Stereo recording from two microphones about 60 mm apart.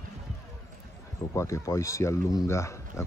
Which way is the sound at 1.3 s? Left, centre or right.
Left.